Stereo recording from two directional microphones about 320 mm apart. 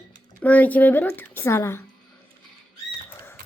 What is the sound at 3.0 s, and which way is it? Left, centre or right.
Rodents, centre.